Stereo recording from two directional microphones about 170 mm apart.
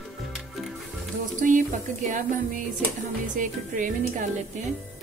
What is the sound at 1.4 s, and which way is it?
Music, 50° right (ahead or behind).